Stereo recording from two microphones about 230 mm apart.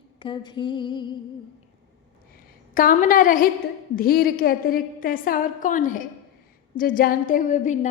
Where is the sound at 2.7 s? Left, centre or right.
Left.